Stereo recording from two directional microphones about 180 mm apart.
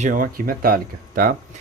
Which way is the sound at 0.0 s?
50° right (ahead or behind).